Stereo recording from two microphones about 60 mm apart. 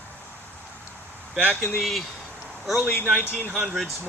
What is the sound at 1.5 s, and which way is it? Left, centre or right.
Speech, left.